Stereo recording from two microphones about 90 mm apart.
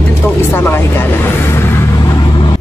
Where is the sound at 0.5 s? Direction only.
30° left (ahead or behind).